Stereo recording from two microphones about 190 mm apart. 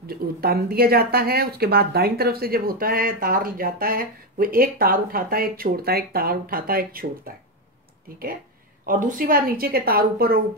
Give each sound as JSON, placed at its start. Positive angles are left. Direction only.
{"t": 0.0, "sound": "speech", "side_deg": -55}
{"t": 8.8, "sound": "speech", "side_deg": -45}